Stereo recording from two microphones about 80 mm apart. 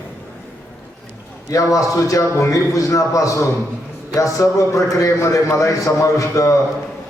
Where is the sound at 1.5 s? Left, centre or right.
Left.